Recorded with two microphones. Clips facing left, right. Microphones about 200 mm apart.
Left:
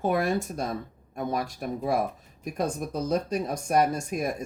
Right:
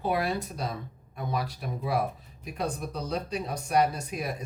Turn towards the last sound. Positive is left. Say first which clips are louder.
# left 5 dB
turn(degrees=45)  # may be behind; listen again after turning